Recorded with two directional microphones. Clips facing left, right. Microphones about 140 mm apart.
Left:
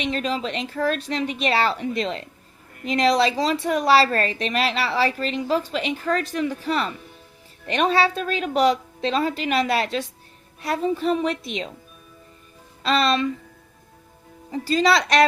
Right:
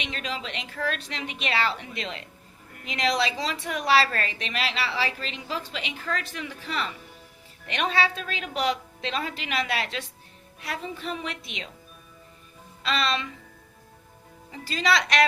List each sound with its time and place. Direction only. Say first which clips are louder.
0.0 s a woman's voice: left 9 dB; 40° left (ahead or behind)
12.8 s music: left 7 dB; 40° left (ahead or behind)
14.5 s a woman's voice: left 6 dB; 40° left (ahead or behind)